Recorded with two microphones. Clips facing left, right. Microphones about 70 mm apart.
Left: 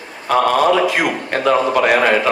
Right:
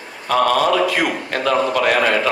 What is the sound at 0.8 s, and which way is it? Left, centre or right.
A man's voice, left.